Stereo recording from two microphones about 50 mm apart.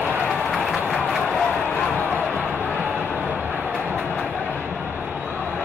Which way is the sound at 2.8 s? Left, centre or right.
Right.